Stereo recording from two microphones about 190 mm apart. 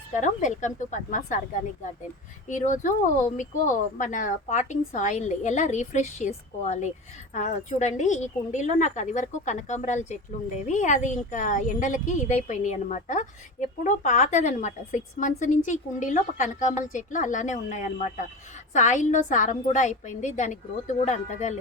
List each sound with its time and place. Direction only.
0.2 s a woman's voice: 40° left (ahead or behind)
2.5 s a woman's voice: 40° left (ahead or behind)